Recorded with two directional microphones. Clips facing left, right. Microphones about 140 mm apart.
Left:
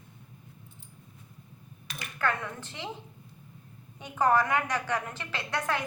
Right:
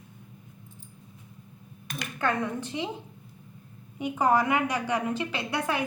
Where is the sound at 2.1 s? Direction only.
20° right (ahead or behind).